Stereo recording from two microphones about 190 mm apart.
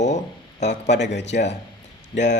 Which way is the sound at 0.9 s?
65° left (ahead or behind).